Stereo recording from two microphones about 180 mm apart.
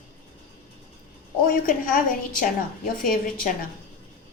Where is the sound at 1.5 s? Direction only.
50° left (ahead or behind).